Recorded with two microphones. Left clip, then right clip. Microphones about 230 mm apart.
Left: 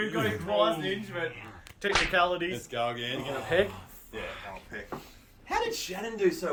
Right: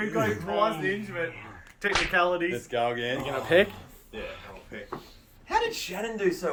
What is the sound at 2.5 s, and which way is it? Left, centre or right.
Speech, centre.